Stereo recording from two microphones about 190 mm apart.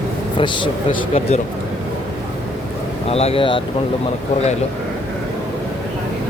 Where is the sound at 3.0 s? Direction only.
30° left (ahead or behind).